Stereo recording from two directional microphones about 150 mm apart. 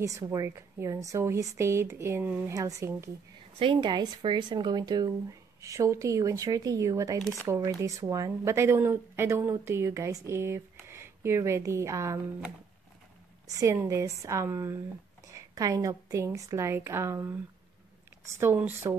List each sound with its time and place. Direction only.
0.0 s speech: 20° right (ahead or behind)
3.5 s speech: 35° right (ahead or behind)
13.5 s a woman's voice: 20° right (ahead or behind)
18.4 s speech: 15° right (ahead or behind)